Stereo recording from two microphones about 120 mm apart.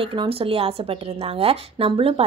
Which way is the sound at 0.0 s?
50° right (ahead or behind).